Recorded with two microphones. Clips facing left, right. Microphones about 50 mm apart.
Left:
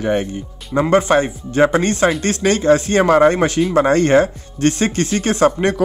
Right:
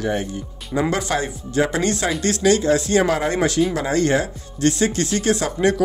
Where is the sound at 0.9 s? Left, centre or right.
Left.